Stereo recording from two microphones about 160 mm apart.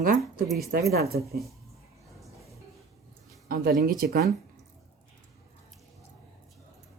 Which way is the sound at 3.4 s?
65° right (ahead or behind).